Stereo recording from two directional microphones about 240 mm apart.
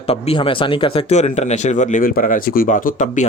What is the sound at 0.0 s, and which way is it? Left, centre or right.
A man's voice, left.